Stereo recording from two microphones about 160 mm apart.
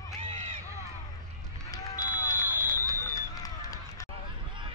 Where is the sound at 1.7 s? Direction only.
25° left (ahead or behind).